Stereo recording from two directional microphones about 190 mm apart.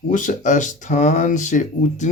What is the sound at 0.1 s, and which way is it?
Speech, 40° left (ahead or behind).